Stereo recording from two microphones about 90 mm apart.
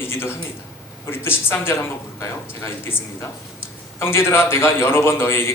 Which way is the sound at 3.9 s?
30° left (ahead or behind).